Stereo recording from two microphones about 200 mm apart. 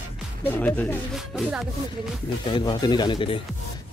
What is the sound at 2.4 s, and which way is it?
Speech, 20° left (ahead or behind).